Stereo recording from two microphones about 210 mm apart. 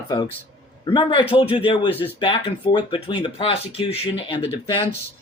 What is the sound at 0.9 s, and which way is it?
Speech, 25° left (ahead or behind).